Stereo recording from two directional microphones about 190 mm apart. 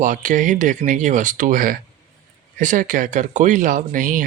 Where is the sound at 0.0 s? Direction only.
40° right (ahead or behind).